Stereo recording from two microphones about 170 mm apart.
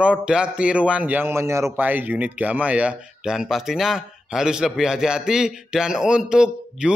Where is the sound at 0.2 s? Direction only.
5° right (ahead or behind).